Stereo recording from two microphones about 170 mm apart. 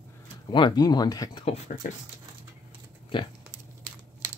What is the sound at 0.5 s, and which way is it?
Speech, 25° left (ahead or behind).